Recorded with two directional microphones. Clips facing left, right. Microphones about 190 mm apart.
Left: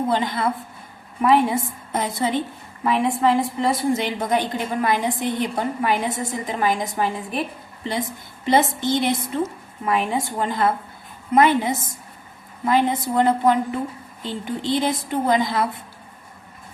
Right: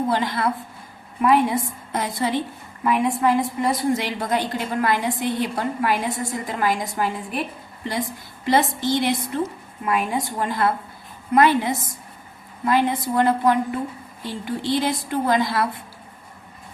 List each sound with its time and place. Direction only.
0.1 s a woman's voice: 20° left (ahead or behind)
8.4 s a woman's voice: 20° left (ahead or behind)